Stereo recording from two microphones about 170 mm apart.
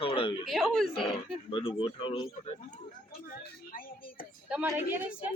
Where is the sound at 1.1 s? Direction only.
30° left (ahead or behind).